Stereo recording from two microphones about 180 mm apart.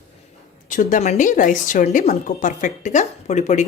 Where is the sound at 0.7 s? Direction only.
45° left (ahead or behind).